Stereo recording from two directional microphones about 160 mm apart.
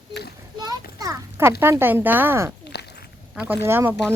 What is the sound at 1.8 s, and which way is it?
A woman's voice, 10° right (ahead or behind).